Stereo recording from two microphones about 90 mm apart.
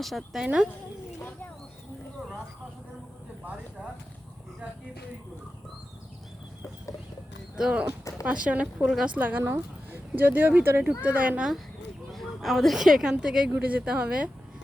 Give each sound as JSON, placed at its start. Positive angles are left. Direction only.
{"t": 0.0, "sound": "a woman's voice", "side_deg": 0}
{"t": 0.4, "sound": "a woman's voice", "side_deg": -10}
{"t": 7.5, "sound": "a woman's voice", "side_deg": -10}
{"t": 8.6, "sound": "a woman's voice", "side_deg": 0}
{"t": 9.1, "sound": "a woman's voice", "side_deg": -20}
{"t": 12.1, "sound": "a woman's voice", "side_deg": 0}